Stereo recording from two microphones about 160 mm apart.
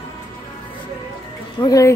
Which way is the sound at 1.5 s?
20° left (ahead or behind).